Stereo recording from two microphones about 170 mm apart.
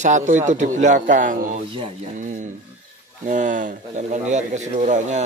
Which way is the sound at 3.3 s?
50° right (ahead or behind).